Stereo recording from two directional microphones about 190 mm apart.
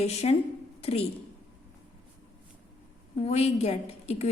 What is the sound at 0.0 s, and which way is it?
A woman's voice, 35° left (ahead or behind).